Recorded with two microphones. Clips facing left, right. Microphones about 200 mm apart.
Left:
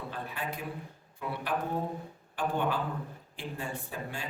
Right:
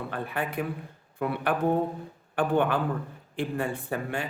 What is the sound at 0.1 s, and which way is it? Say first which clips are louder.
A man's voice: right 6 dB; 60° right (ahead or behind).